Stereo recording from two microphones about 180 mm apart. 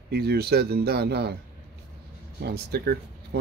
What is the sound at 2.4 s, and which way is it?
Speech, 60° right (ahead or behind).